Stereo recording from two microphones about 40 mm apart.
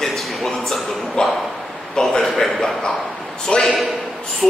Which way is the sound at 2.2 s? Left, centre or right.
Centre.